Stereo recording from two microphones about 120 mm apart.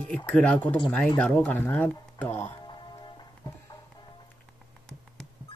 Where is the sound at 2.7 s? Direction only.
40° left (ahead or behind).